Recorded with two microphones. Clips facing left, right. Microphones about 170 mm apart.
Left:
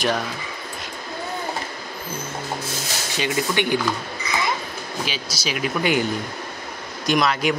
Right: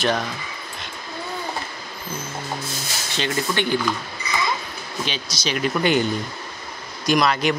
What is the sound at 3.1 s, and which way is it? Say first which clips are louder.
Speech: left 1 dB; 10° left (ahead or behind).